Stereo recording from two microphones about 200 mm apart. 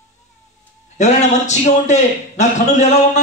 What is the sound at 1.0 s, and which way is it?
A man's voice, 35° left (ahead or behind).